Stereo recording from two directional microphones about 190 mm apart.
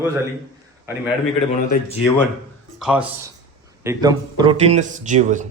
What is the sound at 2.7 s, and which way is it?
Speech, 5° right (ahead or behind).